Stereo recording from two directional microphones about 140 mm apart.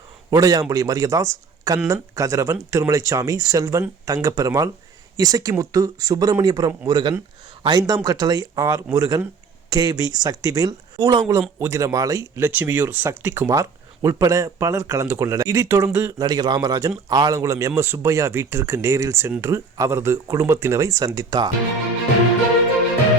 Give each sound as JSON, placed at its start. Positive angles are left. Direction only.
{"t": 0.3, "sound": "speech", "side_deg": -25}
{"t": 12.5, "sound": "speech", "side_deg": -15}
{"t": 16.1, "sound": "speech", "side_deg": -30}